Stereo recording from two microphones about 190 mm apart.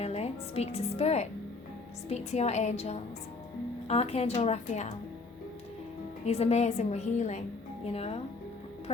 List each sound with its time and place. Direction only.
0.0 s music: 35° left (ahead or behind)
2.0 s a woman's voice: 35° left (ahead or behind)
6.2 s a woman's voice: 35° left (ahead or behind)